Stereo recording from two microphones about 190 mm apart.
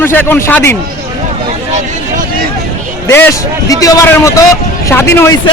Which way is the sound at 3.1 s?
10° left (ahead or behind).